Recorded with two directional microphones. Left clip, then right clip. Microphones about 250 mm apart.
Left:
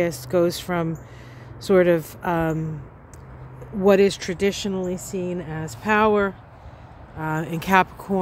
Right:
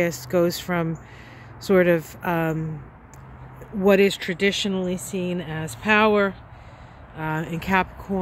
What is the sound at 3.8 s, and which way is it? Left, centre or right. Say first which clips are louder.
Speech: left 1 dB; centre.